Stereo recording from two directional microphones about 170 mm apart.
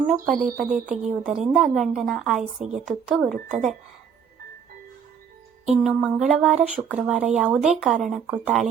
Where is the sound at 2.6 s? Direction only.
40° right (ahead or behind).